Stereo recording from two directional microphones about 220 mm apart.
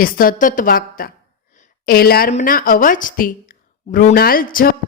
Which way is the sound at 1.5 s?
35° left (ahead or behind).